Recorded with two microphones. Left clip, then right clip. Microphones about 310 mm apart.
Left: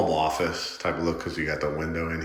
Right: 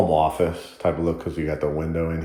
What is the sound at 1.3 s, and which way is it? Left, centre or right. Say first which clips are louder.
Speech: right 3 dB; centre.